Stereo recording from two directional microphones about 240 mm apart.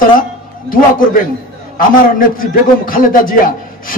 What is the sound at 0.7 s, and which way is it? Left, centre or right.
A man's voice, left.